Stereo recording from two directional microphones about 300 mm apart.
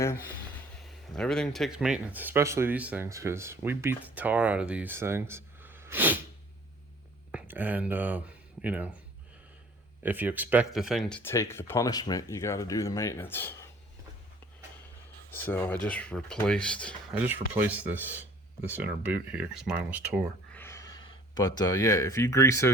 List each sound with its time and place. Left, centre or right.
0.0 s speech: centre
7.3 s speech: centre
10.0 s speech: centre
15.3 s speech: centre
20.6 s speech: centre